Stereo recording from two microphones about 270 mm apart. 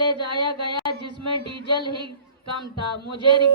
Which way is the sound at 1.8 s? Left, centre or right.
Centre.